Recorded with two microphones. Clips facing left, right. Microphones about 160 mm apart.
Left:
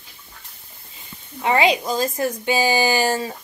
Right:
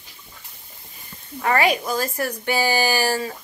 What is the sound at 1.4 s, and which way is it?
A woman's voice, 20° left (ahead or behind).